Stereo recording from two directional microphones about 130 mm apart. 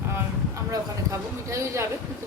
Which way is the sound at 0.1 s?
20° right (ahead or behind).